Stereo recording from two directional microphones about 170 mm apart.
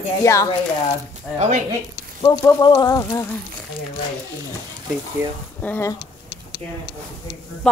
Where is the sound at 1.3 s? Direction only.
40° right (ahead or behind).